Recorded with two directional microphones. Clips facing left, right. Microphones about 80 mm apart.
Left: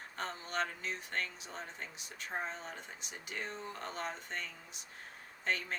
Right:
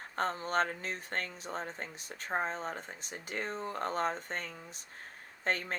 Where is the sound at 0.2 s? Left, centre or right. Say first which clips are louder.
Right 7 dB; right.